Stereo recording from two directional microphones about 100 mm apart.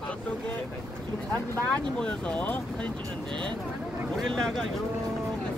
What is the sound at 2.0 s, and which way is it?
Speech, 15° left (ahead or behind).